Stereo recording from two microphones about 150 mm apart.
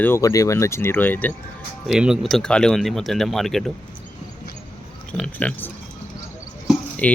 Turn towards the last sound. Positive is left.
turn(degrees=10)  # may be behind; listen again after turning